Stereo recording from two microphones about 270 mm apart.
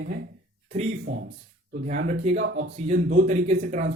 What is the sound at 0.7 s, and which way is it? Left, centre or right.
Speech, right.